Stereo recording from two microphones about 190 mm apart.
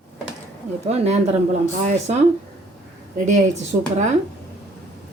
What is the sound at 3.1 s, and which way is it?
Speech, 40° right (ahead or behind).